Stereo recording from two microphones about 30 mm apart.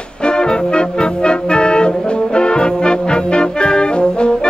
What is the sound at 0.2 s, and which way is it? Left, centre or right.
Music, left.